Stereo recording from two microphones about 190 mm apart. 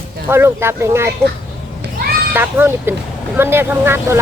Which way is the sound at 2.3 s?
10° right (ahead or behind).